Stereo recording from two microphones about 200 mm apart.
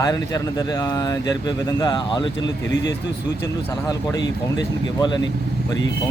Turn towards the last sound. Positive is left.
turn(degrees=20)  # may be behind; listen again after turning